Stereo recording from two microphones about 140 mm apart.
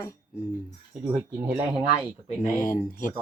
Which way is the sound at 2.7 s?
75° left (ahead or behind).